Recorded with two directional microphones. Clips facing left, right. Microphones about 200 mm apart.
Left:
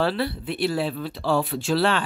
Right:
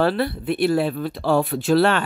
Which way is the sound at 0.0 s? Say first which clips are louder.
Right 4 dB; 50° right (ahead or behind).